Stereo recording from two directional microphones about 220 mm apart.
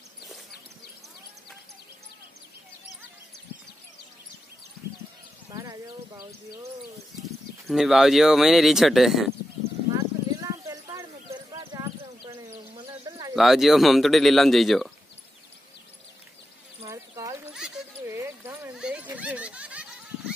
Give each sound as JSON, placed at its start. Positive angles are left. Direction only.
{"t": 5.5, "sound": "horse", "side_deg": -15}
{"t": 7.6, "sound": "speech", "side_deg": 0}
{"t": 9.9, "sound": "a sound", "side_deg": -15}
{"t": 11.5, "sound": "clip-clop", "side_deg": -15}
{"t": 13.4, "sound": "speech", "side_deg": 0}
{"t": 16.8, "sound": "horse", "side_deg": -15}
{"t": 17.6, "sound": "a sound", "side_deg": -5}